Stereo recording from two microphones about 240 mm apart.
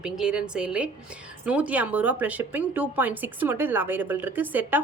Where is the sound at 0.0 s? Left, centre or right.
Centre.